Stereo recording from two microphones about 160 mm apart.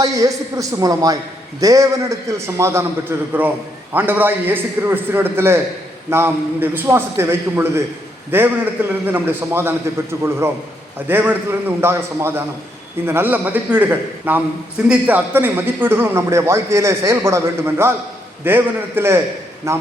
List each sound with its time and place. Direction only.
0.0 s a man's voice: 20° right (ahead or behind)